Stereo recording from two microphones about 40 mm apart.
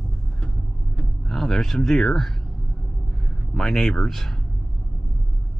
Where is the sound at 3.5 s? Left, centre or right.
Centre.